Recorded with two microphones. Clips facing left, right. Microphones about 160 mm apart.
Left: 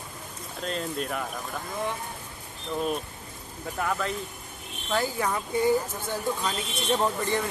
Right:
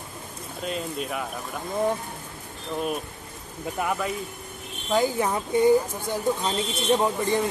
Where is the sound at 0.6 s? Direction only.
5° right (ahead or behind).